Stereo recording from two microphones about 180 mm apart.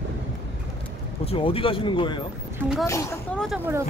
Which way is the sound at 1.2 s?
30° left (ahead or behind).